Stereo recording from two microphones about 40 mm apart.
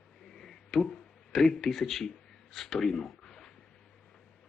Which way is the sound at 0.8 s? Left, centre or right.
Left.